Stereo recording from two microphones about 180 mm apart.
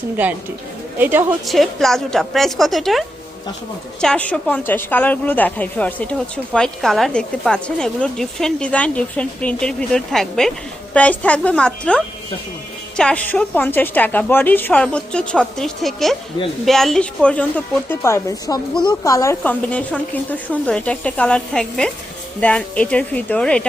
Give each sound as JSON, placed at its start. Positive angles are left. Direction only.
{"t": 0.9, "sound": "a woman's voice", "side_deg": -10}
{"t": 4.0, "sound": "a woman's voice", "side_deg": 5}
{"t": 19.4, "sound": "a woman's voice", "side_deg": 5}